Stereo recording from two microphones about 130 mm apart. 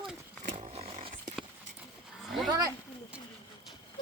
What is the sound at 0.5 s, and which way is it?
Roaring cats, 50° right (ahead or behind).